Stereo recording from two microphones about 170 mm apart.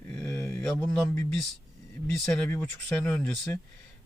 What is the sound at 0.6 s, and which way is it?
Speech, 5° left (ahead or behind).